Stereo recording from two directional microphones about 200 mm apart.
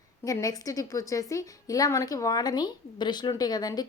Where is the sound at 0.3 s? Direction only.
15° left (ahead or behind).